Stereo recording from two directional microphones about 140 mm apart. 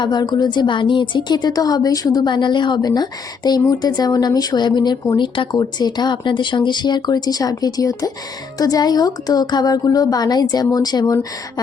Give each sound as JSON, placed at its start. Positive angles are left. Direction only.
{"t": 0.0, "sound": "a woman's voice", "side_deg": 30}